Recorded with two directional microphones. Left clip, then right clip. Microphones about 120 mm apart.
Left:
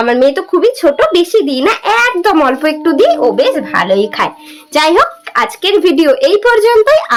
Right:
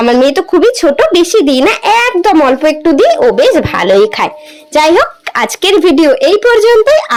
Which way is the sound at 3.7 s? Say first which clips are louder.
Even; 85° right.